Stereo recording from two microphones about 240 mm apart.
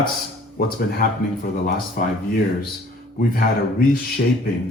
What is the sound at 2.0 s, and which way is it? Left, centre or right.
Speech, left.